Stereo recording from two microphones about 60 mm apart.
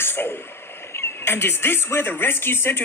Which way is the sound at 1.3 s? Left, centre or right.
Left.